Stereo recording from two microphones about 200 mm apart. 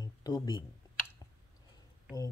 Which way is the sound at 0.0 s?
20° left (ahead or behind).